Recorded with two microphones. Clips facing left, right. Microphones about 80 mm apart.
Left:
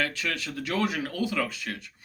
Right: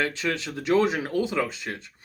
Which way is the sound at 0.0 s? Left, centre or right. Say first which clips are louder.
Right 3 dB; right.